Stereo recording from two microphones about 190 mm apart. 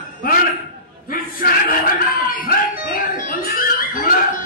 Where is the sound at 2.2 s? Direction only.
45° left (ahead or behind).